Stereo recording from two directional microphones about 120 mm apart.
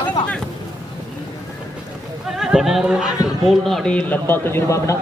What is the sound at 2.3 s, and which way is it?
A man's voice, 5° right (ahead or behind).